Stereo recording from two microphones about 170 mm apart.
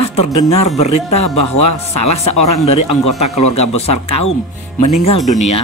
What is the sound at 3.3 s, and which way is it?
Speech, 40° left (ahead or behind).